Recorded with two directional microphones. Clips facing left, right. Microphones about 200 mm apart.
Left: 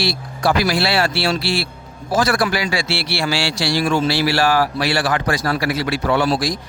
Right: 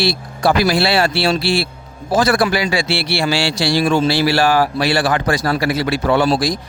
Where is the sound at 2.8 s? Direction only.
55° right (ahead or behind).